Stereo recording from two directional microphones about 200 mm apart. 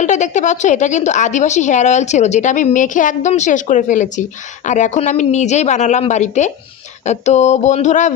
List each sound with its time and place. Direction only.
0.0 s a woman's voice: 35° left (ahead or behind)